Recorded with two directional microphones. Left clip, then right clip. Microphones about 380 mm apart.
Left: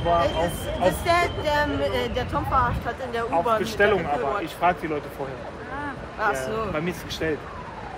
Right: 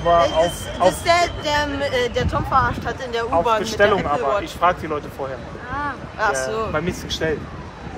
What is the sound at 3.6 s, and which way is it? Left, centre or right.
Speech, centre.